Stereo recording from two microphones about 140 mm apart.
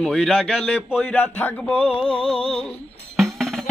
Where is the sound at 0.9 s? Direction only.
15° left (ahead or behind).